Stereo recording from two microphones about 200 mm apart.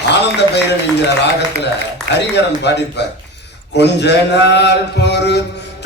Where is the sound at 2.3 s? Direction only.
60° left (ahead or behind).